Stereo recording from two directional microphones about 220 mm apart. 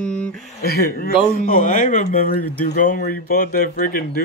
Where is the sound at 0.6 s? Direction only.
45° left (ahead or behind).